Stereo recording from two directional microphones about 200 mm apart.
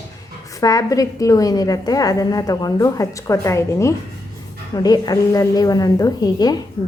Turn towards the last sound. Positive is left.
turn(degrees=20)  # may be behind; listen again after turning